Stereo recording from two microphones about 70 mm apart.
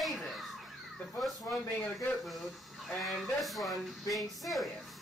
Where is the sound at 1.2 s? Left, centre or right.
Centre.